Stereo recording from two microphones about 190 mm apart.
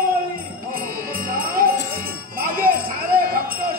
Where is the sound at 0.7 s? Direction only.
50° right (ahead or behind).